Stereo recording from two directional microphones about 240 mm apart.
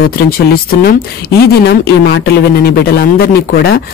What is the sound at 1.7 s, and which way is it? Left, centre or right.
A man's voice, left.